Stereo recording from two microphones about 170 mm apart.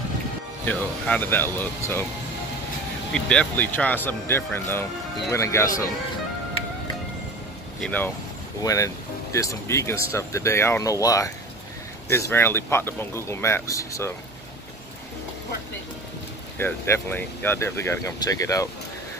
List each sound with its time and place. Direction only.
0.7 s speech: 10° left (ahead or behind)
3.1 s speech: 5° left (ahead or behind)
7.8 s speech: 10° left (ahead or behind)
16.5 s speech: 15° left (ahead or behind)